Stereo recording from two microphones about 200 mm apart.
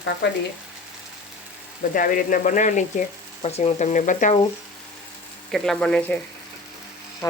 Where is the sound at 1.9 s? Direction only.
45° left (ahead or behind).